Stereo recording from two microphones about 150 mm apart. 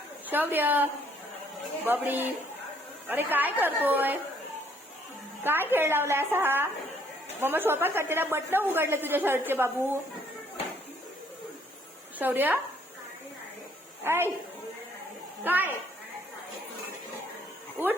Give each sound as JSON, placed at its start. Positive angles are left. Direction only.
{"t": 0.3, "sound": "a woman's voice", "side_deg": -10}
{"t": 5.4, "sound": "a woman's voice", "side_deg": -15}
{"t": 12.2, "sound": "a woman's voice", "side_deg": -10}
{"t": 14.0, "sound": "a woman's voice", "side_deg": -15}
{"t": 15.4, "sound": "a woman's voice", "side_deg": -10}